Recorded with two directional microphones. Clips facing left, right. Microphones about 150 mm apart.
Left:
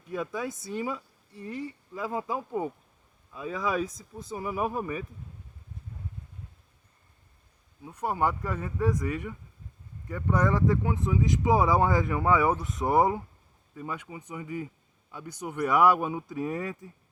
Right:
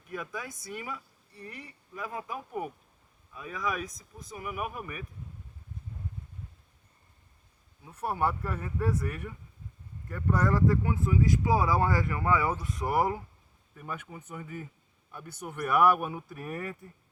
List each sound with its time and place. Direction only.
0.1 s speech: 25° left (ahead or behind)
7.9 s speech: 15° left (ahead or behind)